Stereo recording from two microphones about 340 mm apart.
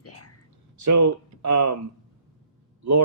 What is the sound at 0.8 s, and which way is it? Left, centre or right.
Speech, right.